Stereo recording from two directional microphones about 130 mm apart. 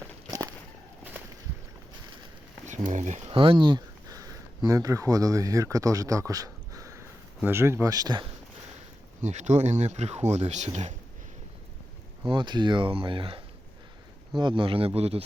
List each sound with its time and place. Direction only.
0.3 s walk: 25° right (ahead or behind)
2.6 s speech: 70° right (ahead or behind)
3.2 s speech: 40° right (ahead or behind)
9.2 s speech: 60° right (ahead or behind)
12.3 s speech: 35° right (ahead or behind); by 15.2 s 50° right (ahead or behind)